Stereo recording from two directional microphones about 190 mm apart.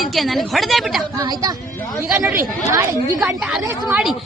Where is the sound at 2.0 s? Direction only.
10° right (ahead or behind).